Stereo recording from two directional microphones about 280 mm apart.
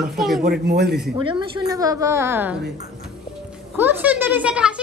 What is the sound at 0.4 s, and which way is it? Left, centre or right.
Speech, right.